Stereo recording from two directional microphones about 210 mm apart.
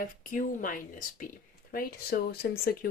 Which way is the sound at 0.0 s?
40° left (ahead or behind).